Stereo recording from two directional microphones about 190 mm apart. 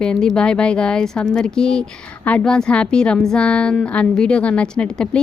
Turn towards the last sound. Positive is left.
turn(degrees=5)  # may be behind; listen again after turning